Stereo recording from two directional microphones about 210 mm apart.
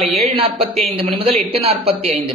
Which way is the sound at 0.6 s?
30° right (ahead or behind).